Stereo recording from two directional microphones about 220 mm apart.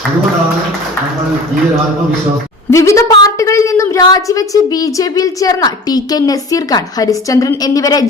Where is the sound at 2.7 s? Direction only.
15° left (ahead or behind).